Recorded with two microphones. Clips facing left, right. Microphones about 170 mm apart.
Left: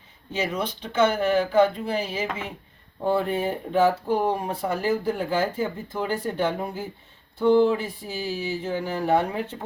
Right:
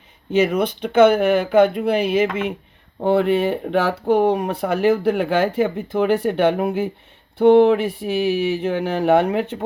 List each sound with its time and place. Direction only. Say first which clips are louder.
0.3 s speech: right 10 dB; 65° right (ahead or behind)